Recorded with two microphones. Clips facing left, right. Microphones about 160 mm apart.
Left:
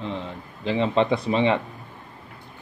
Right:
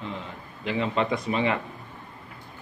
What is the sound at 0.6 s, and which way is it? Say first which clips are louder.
A man's voice: left 5 dB; 30° left (ahead or behind).